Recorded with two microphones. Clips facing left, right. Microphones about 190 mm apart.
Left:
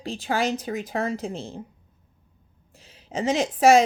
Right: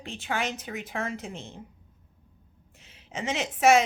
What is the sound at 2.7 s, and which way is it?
Speech, 35° left (ahead or behind).